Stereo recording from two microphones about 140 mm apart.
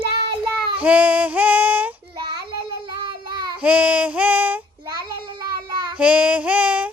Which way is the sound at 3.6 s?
10° right (ahead or behind).